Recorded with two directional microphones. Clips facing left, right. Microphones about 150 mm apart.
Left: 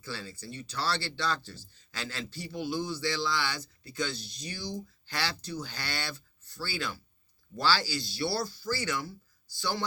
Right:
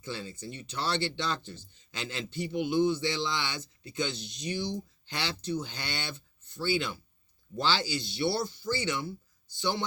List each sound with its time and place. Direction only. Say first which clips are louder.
0.0 s speech: right 2 dB; 20° right (ahead or behind)